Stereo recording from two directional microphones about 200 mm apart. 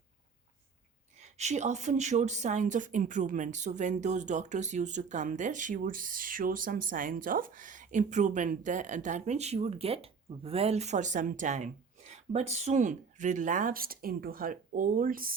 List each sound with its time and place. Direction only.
1.2 s a woman's voice: 35° right (ahead or behind)